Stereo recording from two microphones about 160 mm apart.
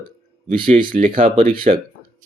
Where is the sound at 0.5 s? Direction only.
60° right (ahead or behind).